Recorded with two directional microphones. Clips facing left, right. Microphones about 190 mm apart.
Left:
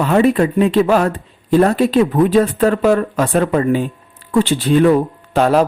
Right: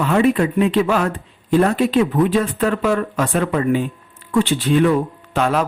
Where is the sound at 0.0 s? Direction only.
35° left (ahead or behind).